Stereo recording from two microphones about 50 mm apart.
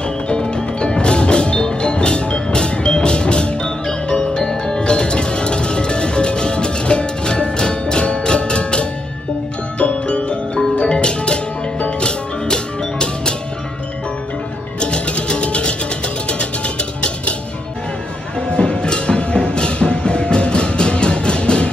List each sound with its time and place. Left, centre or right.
0.3 s music: centre
14.8 s music: left
18.5 s music: centre